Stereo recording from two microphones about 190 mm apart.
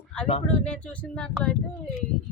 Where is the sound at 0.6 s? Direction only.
5° left (ahead or behind).